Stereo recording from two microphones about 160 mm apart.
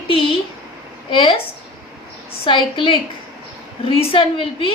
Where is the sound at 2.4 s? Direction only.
30° left (ahead or behind).